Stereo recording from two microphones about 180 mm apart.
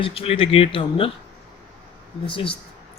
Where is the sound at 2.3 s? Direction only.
30° left (ahead or behind).